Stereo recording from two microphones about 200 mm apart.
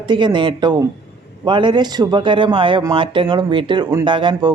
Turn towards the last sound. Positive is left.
turn(degrees=-25)  # may be behind; listen again after turning